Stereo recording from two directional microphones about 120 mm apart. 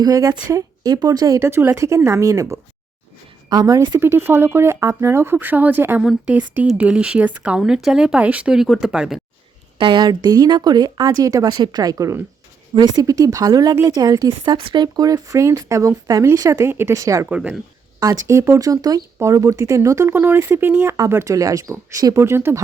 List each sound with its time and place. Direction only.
0.0 s speech: 25° right (ahead or behind)
4.0 s speech: 20° right (ahead or behind)
6.0 s speech: centre (ahead or behind)
6.3 s speech: 15° right (ahead or behind)
9.7 s speech: 40° right (ahead or behind); by 17.2 s 25° right (ahead or behind)
17.2 s speech: 10° right (ahead or behind)
18.3 s speech: 25° right (ahead or behind)